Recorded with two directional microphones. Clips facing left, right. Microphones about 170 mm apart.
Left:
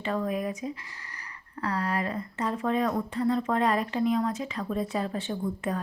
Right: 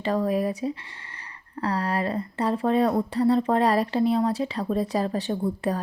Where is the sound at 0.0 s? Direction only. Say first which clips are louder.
Right 5 dB; 35° right (ahead or behind).